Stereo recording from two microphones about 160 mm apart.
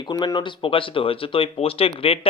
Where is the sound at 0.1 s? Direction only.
25° left (ahead or behind).